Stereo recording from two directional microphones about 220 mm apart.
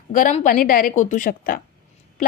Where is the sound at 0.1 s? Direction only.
35° left (ahead or behind).